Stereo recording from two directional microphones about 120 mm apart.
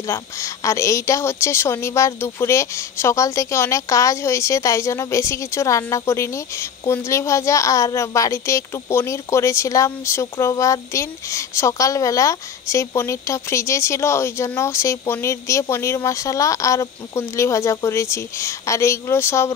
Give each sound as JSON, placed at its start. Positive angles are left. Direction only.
{"t": 0.0, "sound": "a child's voice", "side_deg": 25}